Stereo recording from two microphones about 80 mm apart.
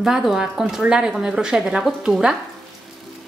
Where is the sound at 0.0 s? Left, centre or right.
Centre.